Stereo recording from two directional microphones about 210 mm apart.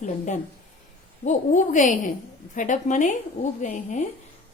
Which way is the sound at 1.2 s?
35° left (ahead or behind).